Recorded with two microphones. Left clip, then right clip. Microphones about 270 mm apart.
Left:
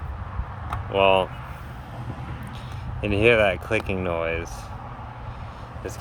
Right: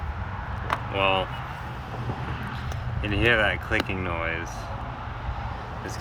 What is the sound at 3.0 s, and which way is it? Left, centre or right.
Speech, left.